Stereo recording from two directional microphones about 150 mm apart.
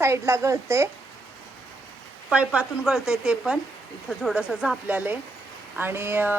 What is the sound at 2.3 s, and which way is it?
A woman's voice, 5° right (ahead or behind).